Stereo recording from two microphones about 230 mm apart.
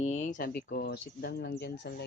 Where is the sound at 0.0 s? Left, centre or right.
Left.